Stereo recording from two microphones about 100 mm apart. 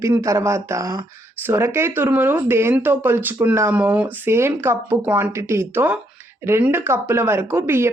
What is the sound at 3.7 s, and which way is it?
Speech, 15° right (ahead or behind).